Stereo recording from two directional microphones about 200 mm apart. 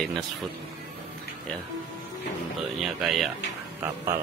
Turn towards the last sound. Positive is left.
turn(degrees=-10)  # may be behind; listen again after turning